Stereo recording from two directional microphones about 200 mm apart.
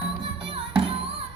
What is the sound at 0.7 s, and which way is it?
Music, 25° right (ahead or behind).